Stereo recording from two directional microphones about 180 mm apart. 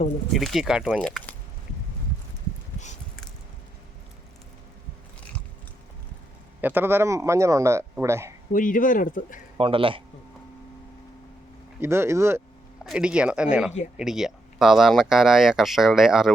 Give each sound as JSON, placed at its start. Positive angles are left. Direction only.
{"t": 0.3, "sound": "speech", "side_deg": 0}
{"t": 0.9, "sound": "speech", "side_deg": 5}
{"t": 6.6, "sound": "speech", "side_deg": -10}
{"t": 8.5, "sound": "speech", "side_deg": 50}
{"t": 9.6, "sound": "a man's voice", "side_deg": -30}
{"t": 11.8, "sound": "speech", "side_deg": -15}
{"t": 12.8, "sound": "speech", "side_deg": -5}